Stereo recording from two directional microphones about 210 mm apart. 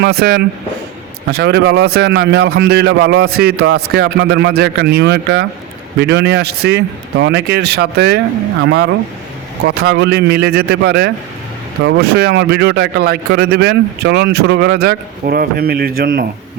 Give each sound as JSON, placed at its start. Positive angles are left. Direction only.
{"t": 0.0, "sound": "a man's voice", "side_deg": -45}